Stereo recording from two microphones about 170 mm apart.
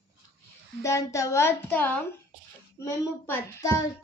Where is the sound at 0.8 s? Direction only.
20° left (ahead or behind).